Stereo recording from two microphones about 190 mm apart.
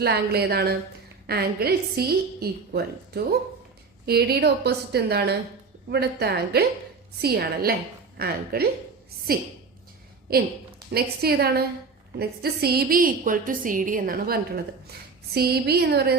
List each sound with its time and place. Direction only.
0.0 s a woman's voice: 55° right (ahead or behind)
10.3 s a woman's voice: 55° right (ahead or behind)